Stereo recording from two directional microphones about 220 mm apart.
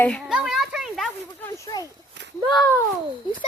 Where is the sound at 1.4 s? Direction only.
15° left (ahead or behind).